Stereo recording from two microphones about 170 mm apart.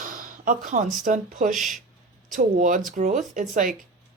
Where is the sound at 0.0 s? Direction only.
50° right (ahead or behind).